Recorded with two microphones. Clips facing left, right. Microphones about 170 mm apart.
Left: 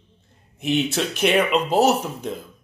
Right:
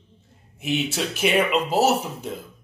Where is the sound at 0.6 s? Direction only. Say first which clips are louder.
Left 3 dB; 10° right (ahead or behind).